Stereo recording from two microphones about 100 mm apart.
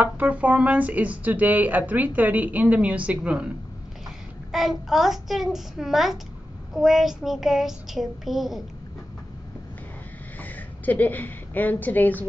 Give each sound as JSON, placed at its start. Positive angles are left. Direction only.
{"t": 0.0, "sound": "speech", "side_deg": -15}
{"t": 4.5, "sound": "a child's voice", "side_deg": -5}
{"t": 10.4, "sound": "a woman's voice", "side_deg": 15}